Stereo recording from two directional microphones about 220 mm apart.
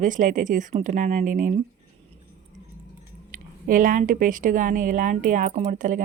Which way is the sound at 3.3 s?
40° right (ahead or behind).